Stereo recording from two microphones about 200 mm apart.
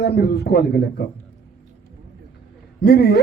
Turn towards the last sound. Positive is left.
turn(degrees=55)  # may be behind; listen again after turning